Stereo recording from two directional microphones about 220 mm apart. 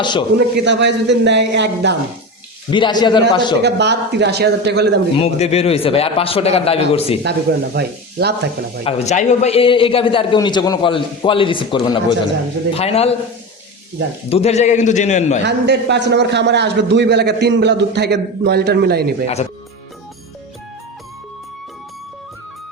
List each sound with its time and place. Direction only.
0.0 s a man's voice: 20° left (ahead or behind)
0.3 s a man's voice: 55° right (ahead or behind)
2.6 s a man's voice: 20° left (ahead or behind)
3.6 s a man's voice: 50° right (ahead or behind)
5.1 s a man's voice: 30° left (ahead or behind)
7.2 s a man's voice: 50° right (ahead or behind)
8.8 s a man's voice: 30° left (ahead or behind)
14.3 s a man's voice: 25° left (ahead or behind)
15.4 s a man's voice: 50° right (ahead or behind)